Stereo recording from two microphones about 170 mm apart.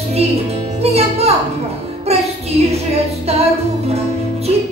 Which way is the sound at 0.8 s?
40° right (ahead or behind).